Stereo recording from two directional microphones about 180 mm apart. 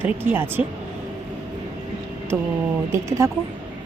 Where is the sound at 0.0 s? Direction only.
10° right (ahead or behind).